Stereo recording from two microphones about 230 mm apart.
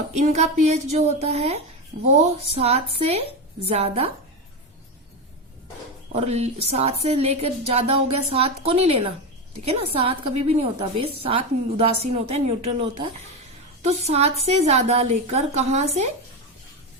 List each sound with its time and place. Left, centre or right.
0.2 s speech: right
6.1 s speech: right